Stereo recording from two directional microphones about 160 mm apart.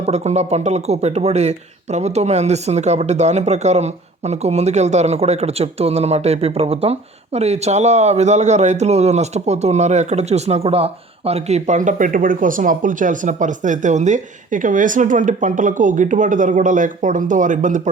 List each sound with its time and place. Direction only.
0.0 s speech: 45° right (ahead or behind)